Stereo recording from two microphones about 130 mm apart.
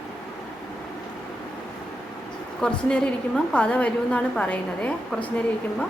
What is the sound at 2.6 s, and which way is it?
A woman's voice, 5° left (ahead or behind).